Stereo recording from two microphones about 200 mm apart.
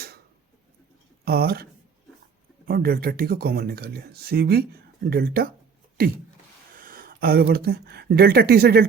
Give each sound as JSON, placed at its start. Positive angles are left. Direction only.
{"t": 1.2, "sound": "speech", "side_deg": -50}
{"t": 2.6, "sound": "speech", "side_deg": -50}
{"t": 6.0, "sound": "a sound", "side_deg": -45}
{"t": 6.7, "sound": "speech", "side_deg": -45}